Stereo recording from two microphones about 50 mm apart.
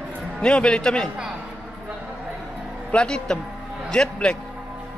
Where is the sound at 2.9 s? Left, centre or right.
Centre.